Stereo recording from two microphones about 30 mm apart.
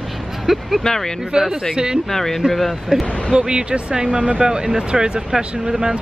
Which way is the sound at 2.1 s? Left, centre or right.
Centre.